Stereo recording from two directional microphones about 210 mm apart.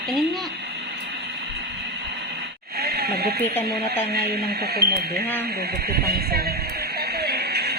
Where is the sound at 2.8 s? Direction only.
50° right (ahead or behind).